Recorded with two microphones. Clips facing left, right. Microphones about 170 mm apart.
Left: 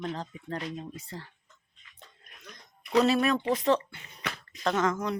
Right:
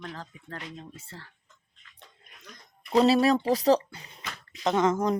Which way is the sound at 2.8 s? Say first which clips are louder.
Right 3 dB; 30° right (ahead or behind).